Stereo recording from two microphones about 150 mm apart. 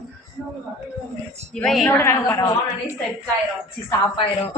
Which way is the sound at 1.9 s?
15° left (ahead or behind).